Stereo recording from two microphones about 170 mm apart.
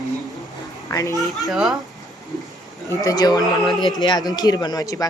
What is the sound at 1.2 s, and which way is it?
Music, centre (ahead or behind).